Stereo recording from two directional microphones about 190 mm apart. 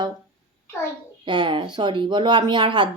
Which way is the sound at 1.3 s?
25° right (ahead or behind).